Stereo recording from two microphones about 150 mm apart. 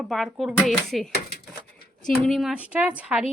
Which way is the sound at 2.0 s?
Centre (ahead or behind).